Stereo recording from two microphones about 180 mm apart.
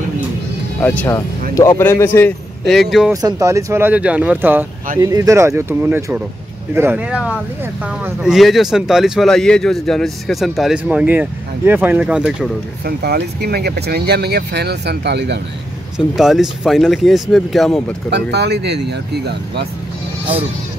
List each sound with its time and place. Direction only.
0.7 s a man's voice: 10° left (ahead or behind)
2.7 s speech: centre (ahead or behind)
3.1 s speech: 20° right (ahead or behind)
12.8 s speech: 60° right (ahead or behind)
16.2 s speech: centre (ahead or behind)
18.1 s speech: 65° right (ahead or behind)